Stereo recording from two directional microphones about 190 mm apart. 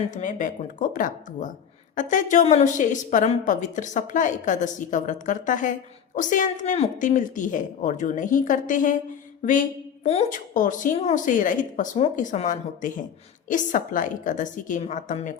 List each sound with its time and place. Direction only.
0.1 s a woman's voice: 45° left (ahead or behind)